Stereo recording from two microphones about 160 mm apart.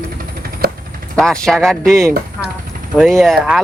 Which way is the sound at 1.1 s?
5° left (ahead or behind).